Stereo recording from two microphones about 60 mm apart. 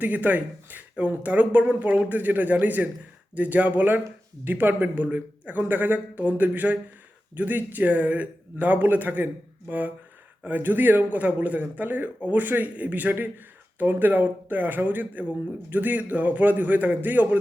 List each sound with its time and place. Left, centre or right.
0.0 s speech: right